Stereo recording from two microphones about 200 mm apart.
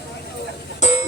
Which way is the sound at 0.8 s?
35° left (ahead or behind).